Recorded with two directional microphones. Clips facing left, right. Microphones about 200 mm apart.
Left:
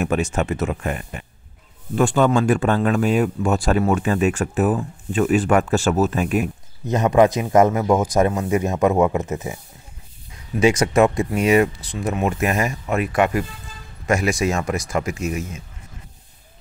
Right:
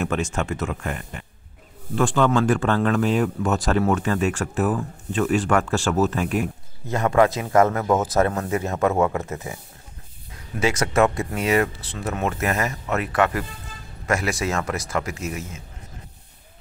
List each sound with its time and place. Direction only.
0.0 s speech: 15° left (ahead or behind)
10.6 s speech: 15° left (ahead or behind)